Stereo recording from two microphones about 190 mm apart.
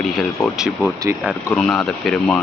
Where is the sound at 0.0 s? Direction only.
Centre (ahead or behind).